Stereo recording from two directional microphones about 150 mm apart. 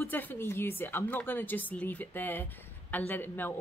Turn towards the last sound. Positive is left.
turn(degrees=15)  # may be behind; listen again after turning